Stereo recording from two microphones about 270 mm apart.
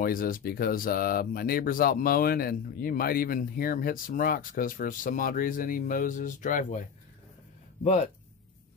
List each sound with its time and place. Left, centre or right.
0.0 s speech: left
7.8 s speech: left